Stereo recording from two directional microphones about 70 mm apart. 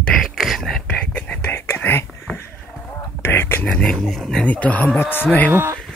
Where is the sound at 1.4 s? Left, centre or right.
Left.